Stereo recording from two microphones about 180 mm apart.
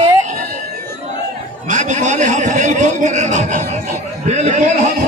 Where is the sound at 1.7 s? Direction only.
40° right (ahead or behind).